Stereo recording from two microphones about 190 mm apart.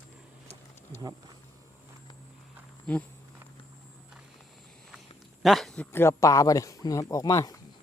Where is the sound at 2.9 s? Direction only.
5° left (ahead or behind).